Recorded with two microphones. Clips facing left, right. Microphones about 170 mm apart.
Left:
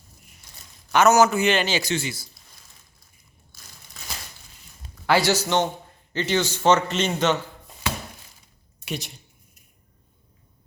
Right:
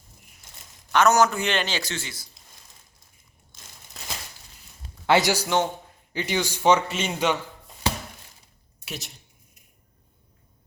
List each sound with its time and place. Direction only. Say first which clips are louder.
0.9 s a man's voice: left 2 dB; 5° left (ahead or behind)
5.0 s a man's voice: even; 20° right (ahead or behind)
5.3 s a man's voice: left 1 dB; 10° right (ahead or behind)
8.8 s a woman's voice: left 6 dB; centre (ahead or behind)